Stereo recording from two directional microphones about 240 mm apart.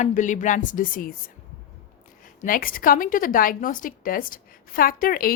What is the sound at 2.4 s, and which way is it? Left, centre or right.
A woman's voice, left.